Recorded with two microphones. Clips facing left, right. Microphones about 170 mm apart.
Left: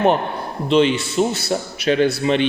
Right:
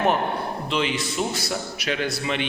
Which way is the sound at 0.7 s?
25° left (ahead or behind).